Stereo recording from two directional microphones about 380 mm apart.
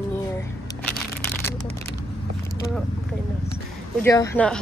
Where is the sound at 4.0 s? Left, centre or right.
Centre.